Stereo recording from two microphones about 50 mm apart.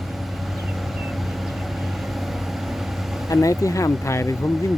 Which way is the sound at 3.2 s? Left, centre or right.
Left.